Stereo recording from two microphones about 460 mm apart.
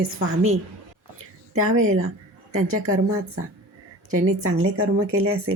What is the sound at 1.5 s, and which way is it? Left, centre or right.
A woman's voice, right.